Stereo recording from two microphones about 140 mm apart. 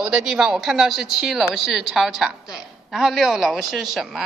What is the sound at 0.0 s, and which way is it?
Speech, 5° right (ahead or behind).